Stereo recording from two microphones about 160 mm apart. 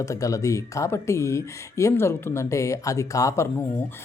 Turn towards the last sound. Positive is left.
turn(degrees=15)  # may be behind; listen again after turning